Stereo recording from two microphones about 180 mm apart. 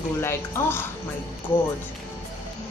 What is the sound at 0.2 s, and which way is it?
Speech, 15° left (ahead or behind).